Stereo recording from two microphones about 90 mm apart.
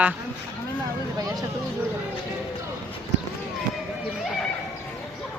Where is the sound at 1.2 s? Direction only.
45° right (ahead or behind).